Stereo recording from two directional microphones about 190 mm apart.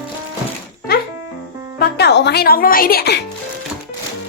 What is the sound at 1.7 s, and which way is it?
Speech, 55° left (ahead or behind).